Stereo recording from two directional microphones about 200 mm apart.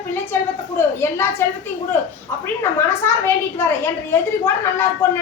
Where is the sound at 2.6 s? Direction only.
10° left (ahead or behind).